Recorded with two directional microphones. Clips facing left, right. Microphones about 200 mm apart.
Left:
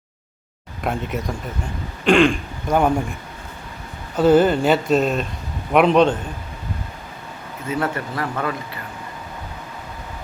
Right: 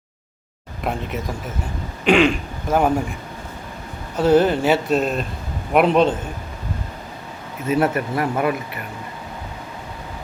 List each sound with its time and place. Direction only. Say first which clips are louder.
0.9 s speech: left 1 dB; centre (ahead or behind)
4.2 s speech: left 1 dB; centre (ahead or behind)
7.7 s speech: right 5 dB; 25° right (ahead or behind)